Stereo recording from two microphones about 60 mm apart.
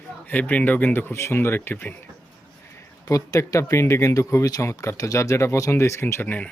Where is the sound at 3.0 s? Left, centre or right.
Left.